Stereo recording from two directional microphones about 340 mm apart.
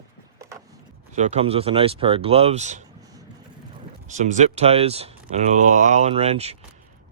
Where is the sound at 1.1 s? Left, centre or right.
Centre.